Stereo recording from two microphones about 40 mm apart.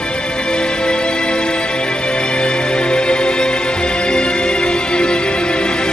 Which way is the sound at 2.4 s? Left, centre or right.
Left.